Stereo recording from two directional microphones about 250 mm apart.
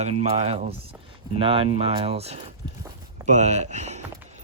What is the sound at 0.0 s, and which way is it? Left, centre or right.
Speech, right.